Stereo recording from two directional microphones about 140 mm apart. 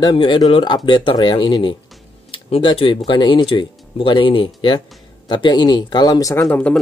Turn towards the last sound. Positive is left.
turn(degrees=10)  # may be behind; listen again after turning